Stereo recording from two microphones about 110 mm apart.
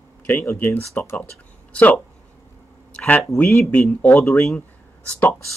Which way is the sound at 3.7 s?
15° left (ahead or behind).